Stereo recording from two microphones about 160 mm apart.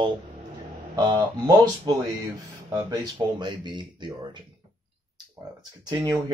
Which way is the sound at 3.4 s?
30° right (ahead or behind).